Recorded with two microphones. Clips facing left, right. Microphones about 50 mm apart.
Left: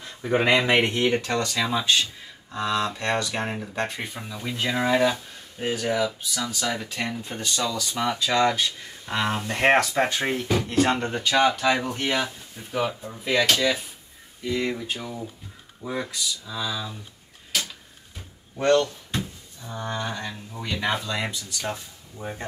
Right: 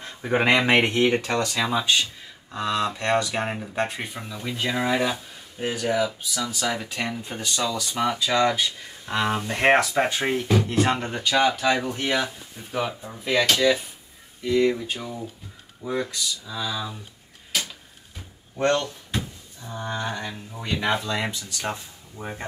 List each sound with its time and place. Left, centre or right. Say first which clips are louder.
0.0 s speech: even; centre
17.5 s a sound: even; centre
19.8 s speech: right 1 dB; centre